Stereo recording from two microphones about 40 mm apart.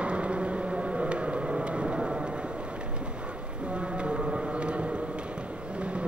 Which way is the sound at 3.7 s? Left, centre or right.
Right.